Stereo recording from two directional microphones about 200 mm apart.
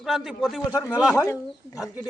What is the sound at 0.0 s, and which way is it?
Speech, centre (ahead or behind).